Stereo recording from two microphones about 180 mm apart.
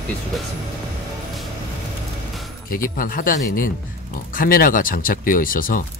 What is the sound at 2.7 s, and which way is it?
Speech, 50° left (ahead or behind).